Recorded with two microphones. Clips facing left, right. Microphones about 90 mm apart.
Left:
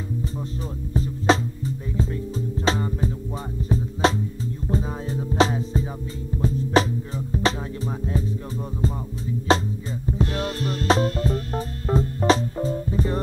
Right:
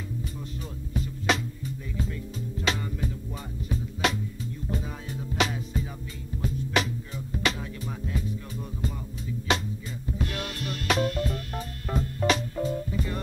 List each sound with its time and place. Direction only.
0.9 s music: 35° left (ahead or behind)
9.5 s music: 35° left (ahead or behind)